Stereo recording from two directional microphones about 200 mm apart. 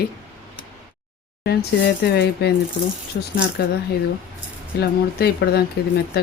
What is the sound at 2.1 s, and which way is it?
Speech, 55° left (ahead or behind).